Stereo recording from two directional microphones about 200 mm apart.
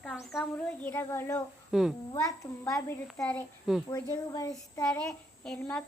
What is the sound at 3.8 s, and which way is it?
Speech, 20° left (ahead or behind).